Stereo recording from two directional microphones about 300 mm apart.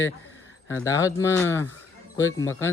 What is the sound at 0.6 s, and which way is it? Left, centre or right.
Speech, centre.